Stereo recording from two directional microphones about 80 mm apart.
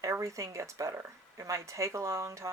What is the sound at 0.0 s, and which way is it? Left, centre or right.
Speech, right.